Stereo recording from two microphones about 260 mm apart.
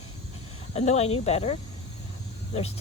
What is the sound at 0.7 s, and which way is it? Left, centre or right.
Speech, left.